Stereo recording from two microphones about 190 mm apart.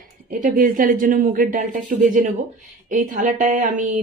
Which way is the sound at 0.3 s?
45° right (ahead or behind).